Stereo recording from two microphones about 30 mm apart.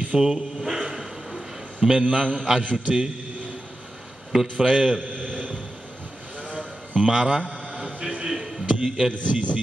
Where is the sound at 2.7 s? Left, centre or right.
Right.